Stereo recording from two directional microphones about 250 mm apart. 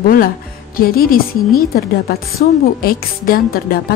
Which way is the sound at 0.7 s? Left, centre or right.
Left.